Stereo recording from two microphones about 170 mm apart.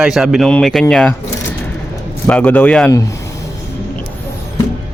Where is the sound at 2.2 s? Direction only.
10° left (ahead or behind).